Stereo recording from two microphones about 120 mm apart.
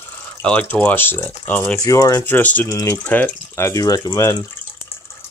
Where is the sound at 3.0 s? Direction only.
15° left (ahead or behind).